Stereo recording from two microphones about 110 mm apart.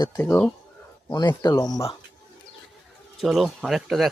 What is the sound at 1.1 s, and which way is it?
Speech, 40° left (ahead or behind).